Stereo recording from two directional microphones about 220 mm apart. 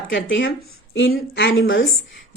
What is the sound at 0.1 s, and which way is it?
A woman's voice, 55° left (ahead or behind).